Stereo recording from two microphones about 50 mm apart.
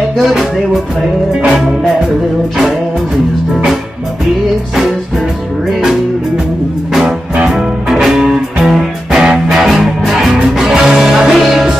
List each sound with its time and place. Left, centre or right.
0.2 s music: centre
7.1 s music: centre